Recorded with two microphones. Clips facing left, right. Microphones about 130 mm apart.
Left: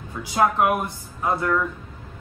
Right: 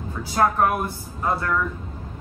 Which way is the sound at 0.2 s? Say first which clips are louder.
Even; 15° left (ahead or behind).